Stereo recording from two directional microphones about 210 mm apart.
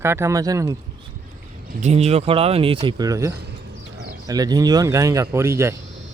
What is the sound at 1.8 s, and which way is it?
Speech, 30° right (ahead or behind).